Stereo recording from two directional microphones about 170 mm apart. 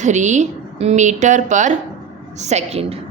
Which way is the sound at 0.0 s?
45° right (ahead or behind).